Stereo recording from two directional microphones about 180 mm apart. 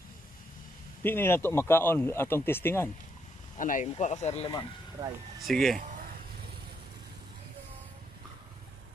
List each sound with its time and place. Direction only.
1.0 s speech: 10° left (ahead or behind)
3.5 s speech: 45° left (ahead or behind)
5.0 s speech: 20° right (ahead or behind)
5.4 s speech: centre (ahead or behind)